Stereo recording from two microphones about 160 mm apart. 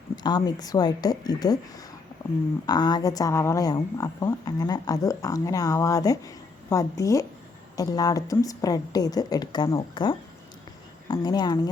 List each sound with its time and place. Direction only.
0.2 s a woman's voice: 25° left (ahead or behind)
2.2 s a sound: 20° left (ahead or behind)
2.6 s a woman's voice: 25° left (ahead or behind)